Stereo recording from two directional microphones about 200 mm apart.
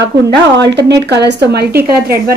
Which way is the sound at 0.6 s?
60° right (ahead or behind).